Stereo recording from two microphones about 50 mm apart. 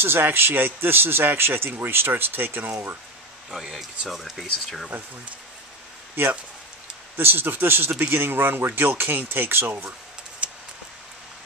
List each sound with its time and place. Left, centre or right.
0.0 s a man's voice: right
3.4 s speech: centre
4.1 s speech: centre
7.2 s a man's voice: right
10.4 s a sound: right